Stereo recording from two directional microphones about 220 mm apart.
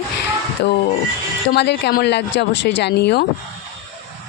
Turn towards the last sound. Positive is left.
turn(degrees=50)  # may be behind; listen again after turning